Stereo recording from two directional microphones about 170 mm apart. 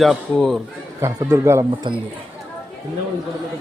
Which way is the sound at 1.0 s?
15° right (ahead or behind).